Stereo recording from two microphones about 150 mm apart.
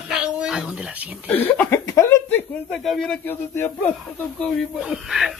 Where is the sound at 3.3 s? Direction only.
15° left (ahead or behind).